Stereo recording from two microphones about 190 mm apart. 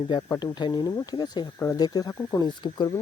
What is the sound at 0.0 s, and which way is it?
Speech, 20° left (ahead or behind).